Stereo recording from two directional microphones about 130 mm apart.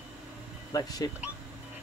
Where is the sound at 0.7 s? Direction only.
30° left (ahead or behind).